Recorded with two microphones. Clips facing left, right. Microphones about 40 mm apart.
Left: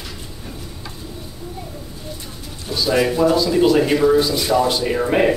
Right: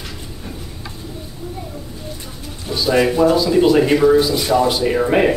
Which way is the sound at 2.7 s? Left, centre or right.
Centre.